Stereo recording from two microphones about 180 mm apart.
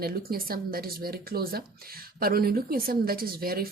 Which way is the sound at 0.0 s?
55° right (ahead or behind).